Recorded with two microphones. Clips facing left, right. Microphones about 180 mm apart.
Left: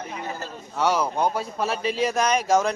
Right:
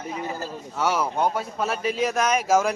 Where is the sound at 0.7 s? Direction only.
5° right (ahead or behind).